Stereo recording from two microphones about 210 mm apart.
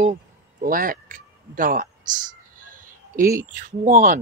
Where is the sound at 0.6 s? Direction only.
40° right (ahead or behind).